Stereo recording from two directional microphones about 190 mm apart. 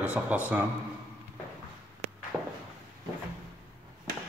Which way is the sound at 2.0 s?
35° right (ahead or behind).